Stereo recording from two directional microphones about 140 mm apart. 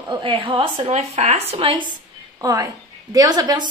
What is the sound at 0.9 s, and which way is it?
Speech, 50° right (ahead or behind).